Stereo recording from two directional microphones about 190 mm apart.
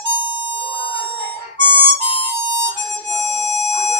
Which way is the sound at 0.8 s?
25° left (ahead or behind).